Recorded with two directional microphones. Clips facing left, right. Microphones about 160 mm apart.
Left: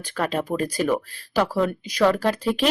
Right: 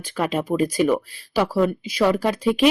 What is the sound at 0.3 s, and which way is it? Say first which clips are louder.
Speech: right 6 dB; 10° right (ahead or behind).